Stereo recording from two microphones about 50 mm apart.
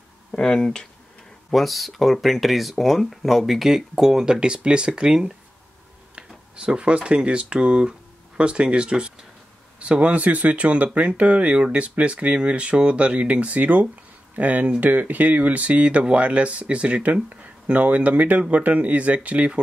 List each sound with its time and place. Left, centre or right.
0.3 s speech: centre
1.5 s speech: centre; by 19.6 s right